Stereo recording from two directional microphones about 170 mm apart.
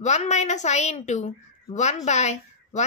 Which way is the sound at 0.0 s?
40° left (ahead or behind).